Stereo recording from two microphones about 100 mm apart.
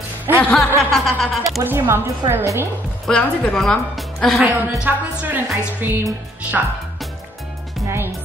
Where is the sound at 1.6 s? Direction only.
20° right (ahead or behind).